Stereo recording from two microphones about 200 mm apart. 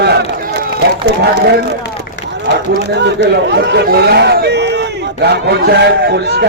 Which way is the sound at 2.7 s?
60° right (ahead or behind).